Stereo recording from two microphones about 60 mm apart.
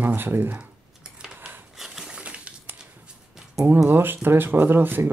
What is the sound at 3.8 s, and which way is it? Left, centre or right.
Speech, right.